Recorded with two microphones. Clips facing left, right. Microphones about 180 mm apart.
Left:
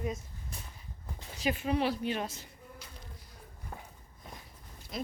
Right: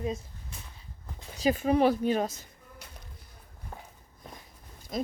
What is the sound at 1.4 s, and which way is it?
Speech, 40° right (ahead or behind).